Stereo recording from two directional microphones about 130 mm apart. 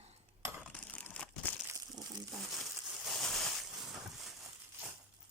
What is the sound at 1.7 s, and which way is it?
Crumpling, 30° right (ahead or behind).